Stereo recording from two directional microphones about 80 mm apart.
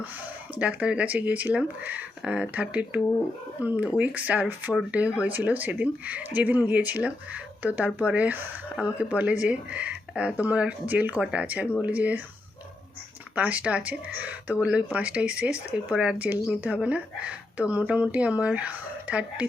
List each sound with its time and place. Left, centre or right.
0.6 s speech: centre
13.3 s speech: centre